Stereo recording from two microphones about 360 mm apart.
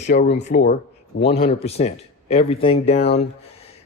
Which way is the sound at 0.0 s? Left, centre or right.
Left.